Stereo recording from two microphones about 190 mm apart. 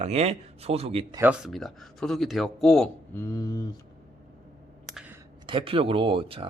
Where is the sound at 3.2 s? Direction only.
20° left (ahead or behind).